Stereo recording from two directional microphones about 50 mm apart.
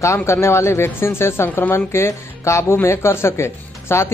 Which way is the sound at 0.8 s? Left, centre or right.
Left.